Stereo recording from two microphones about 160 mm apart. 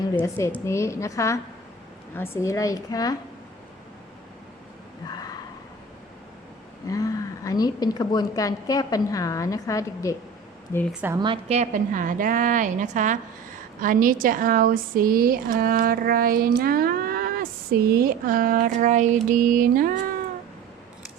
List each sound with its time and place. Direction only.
0.2 s a woman's voice: 15° left (ahead or behind)
6.8 s a woman's voice: 20° left (ahead or behind)
11.2 s a woman's voice: 35° right (ahead or behind); by 20.0 s 60° right (ahead or behind)